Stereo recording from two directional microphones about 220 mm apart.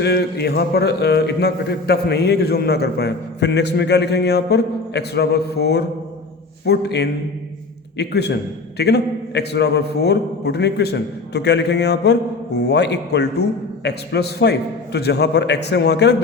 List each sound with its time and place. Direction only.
0.0 s a man's voice: 50° left (ahead or behind)